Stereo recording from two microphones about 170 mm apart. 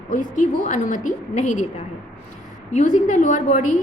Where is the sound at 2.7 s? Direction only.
45° left (ahead or behind).